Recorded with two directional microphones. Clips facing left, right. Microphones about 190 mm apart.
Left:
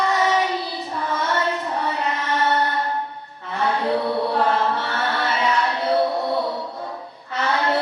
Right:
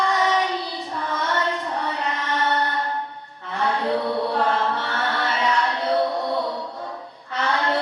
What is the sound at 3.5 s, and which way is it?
Chant, 10° left (ahead or behind).